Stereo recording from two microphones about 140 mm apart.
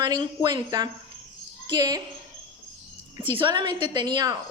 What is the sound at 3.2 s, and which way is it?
A woman's voice, 35° right (ahead or behind).